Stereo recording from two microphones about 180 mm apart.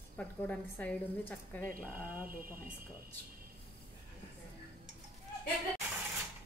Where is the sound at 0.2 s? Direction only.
5° left (ahead or behind).